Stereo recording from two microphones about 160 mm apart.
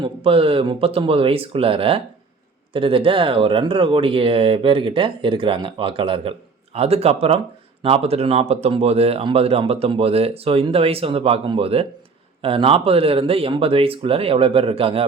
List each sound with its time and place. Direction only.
0.0 s speech: 35° right (ahead or behind)